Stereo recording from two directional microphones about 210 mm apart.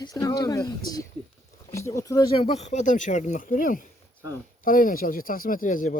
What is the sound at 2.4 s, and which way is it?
Speech, 30° left (ahead or behind).